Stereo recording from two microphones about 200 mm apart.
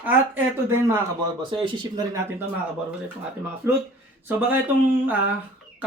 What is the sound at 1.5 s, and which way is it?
Speech, 20° right (ahead or behind).